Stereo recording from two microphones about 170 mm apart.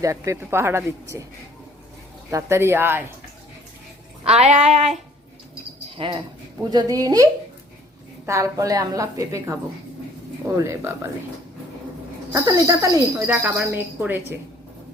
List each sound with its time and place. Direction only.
0.0 s speech: 20° right (ahead or behind)
2.3 s speech: 15° right (ahead or behind)
4.2 s a sound: 40° right (ahead or behind)
6.0 s a woman's voice: 30° right (ahead or behind)
8.3 s a woman's voice: 20° right (ahead or behind)
10.6 s speech: 15° right (ahead or behind)
12.3 s speech: 20° right (ahead or behind)